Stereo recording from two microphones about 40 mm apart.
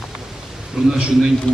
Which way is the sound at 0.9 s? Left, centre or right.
Centre.